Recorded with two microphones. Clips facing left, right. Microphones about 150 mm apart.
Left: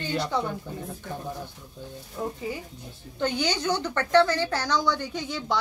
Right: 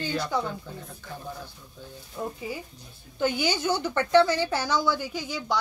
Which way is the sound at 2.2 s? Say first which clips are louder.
Left 2 dB; centre (ahead or behind).